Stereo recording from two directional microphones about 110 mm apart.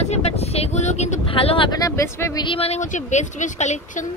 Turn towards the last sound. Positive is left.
turn(degrees=90)